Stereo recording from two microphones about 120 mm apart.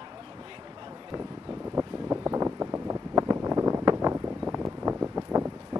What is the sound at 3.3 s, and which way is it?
Wind noise, 25° right (ahead or behind).